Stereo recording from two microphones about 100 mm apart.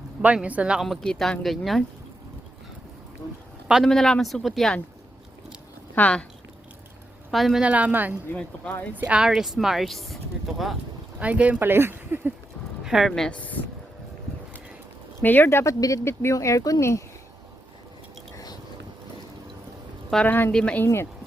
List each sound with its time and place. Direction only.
0.2 s speech: 15° right (ahead or behind)
0.8 s speech: centre (ahead or behind)
3.8 s speech: 5° left (ahead or behind)
5.9 s speech: 15° left (ahead or behind)
7.3 s speech: centre (ahead or behind)
7.6 s speech: 10° right (ahead or behind)
8.3 s speech: 15° left (ahead or behind)
9.0 s speech: 10° right (ahead or behind)
11.2 s speech: 15° right (ahead or behind)
12.8 s speech: 5° right (ahead or behind); by 13.6 s 15° left (ahead or behind)
15.2 s speech: 20° left (ahead or behind)
20.2 s speech: 20° left (ahead or behind)
20.5 s speech: 10° left (ahead or behind)
20.8 s speech: 25° left (ahead or behind)